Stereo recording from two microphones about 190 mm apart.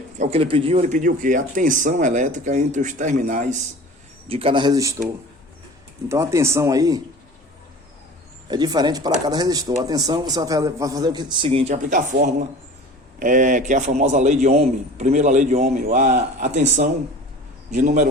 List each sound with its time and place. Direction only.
0.2 s speech: 30° right (ahead or behind)
4.3 s a man's voice: 30° right (ahead or behind)
6.1 s speech: 15° right (ahead or behind)
8.4 s a man's voice: 20° right (ahead or behind); by 18.1 s 40° right (ahead or behind)